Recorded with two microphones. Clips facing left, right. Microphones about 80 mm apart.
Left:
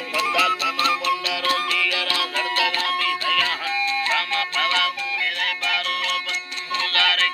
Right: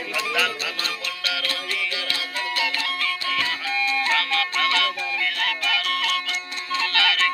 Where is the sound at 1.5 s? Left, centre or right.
Left.